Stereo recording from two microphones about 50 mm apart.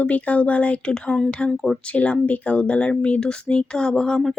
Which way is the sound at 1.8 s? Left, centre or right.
Left.